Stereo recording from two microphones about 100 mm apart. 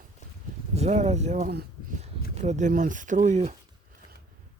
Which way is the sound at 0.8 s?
90° right.